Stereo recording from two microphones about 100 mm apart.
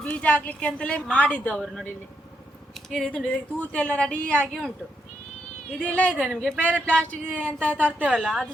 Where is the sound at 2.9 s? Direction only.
Centre (ahead or behind).